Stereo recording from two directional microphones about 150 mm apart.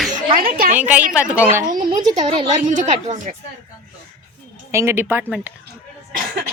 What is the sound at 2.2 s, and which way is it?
A woman's voice, 55° right (ahead or behind).